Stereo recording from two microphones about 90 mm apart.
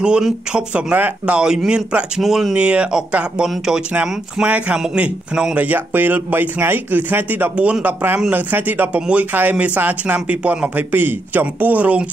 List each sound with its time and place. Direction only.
0.0 s speech: 10° right (ahead or behind)